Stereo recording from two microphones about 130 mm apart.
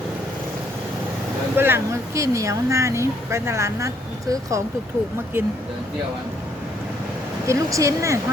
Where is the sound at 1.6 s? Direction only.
15° right (ahead or behind).